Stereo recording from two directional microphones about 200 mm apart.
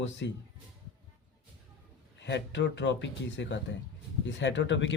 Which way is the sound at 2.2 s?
60° left (ahead or behind).